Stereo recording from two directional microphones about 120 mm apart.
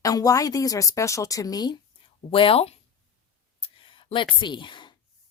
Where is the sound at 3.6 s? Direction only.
45° left (ahead or behind).